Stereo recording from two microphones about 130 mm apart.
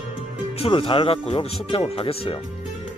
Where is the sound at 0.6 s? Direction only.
45° left (ahead or behind).